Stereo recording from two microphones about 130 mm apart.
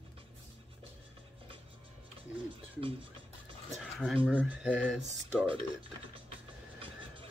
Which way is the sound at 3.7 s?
Centre (ahead or behind).